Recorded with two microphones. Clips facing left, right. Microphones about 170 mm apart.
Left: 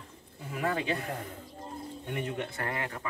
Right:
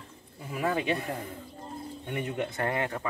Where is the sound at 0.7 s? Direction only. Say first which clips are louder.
Right 3 dB; 15° right (ahead or behind).